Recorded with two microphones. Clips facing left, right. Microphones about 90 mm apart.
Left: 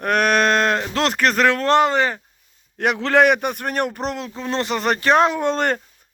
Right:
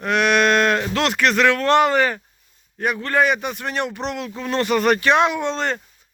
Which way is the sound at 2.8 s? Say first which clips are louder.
Left 3 dB; 70° left (ahead or behind).